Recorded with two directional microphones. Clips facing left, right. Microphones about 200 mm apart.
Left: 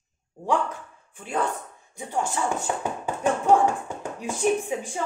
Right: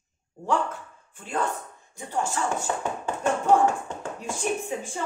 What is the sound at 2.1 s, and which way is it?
Speech, 15° left (ahead or behind).